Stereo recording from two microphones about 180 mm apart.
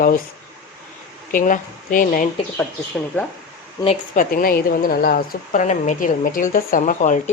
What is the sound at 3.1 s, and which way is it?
Speech, 10° left (ahead or behind).